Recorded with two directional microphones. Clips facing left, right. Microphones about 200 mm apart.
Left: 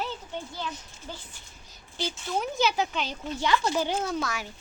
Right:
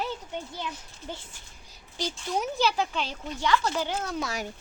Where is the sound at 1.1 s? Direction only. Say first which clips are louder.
Right 2 dB; 20° right (ahead or behind).